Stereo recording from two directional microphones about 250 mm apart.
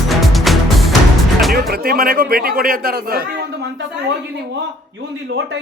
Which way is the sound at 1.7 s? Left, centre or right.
Right.